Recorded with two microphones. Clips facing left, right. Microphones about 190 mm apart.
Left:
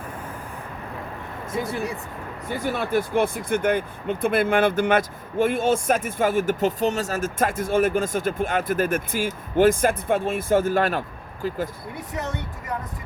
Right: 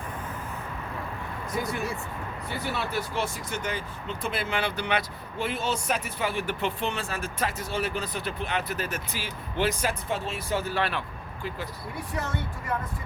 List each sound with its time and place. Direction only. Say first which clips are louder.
1.5 s speech: left 4 dB; 30° left (ahead or behind)
2.5 s speech: left 8 dB; 50° left (ahead or behind)
11.9 s speech: left 2 dB; 20° left (ahead or behind)